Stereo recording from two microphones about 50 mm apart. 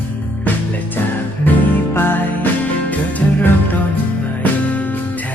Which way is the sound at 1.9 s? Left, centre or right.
Left.